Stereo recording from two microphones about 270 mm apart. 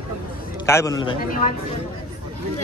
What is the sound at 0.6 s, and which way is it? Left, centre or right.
Speech, centre.